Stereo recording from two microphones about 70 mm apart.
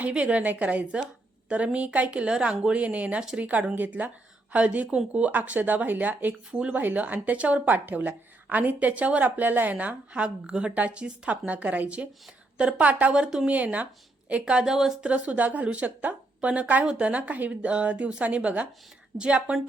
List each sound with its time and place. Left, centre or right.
0.1 s speech: centre
15.0 s speech: centre